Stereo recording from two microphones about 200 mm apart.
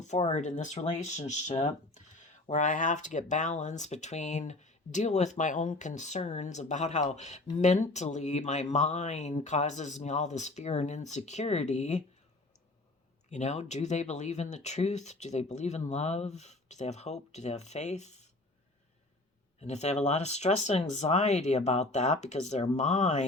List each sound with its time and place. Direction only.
0.0 s speech: 35° left (ahead or behind)
13.3 s speech: 35° left (ahead or behind)
19.5 s speech: 35° left (ahead or behind)